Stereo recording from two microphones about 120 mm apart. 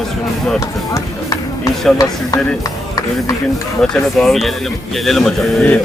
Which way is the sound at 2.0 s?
30° left (ahead or behind).